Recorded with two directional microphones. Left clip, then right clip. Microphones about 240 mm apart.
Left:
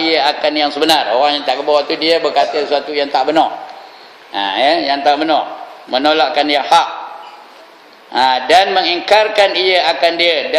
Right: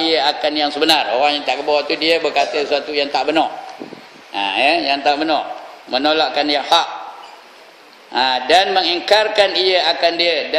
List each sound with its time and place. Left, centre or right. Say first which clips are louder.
0.0 s a man's voice: left 3 dB; centre
8.1 s a man's voice: left 3 dB; centre